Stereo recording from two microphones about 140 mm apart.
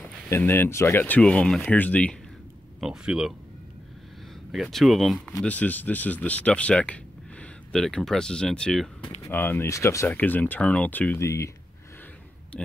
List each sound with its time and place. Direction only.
0.3 s speech: 15° left (ahead or behind)
2.8 s speech: 5° right (ahead or behind)
4.5 s speech: centre (ahead or behind)
9.2 s speech: 15° left (ahead or behind)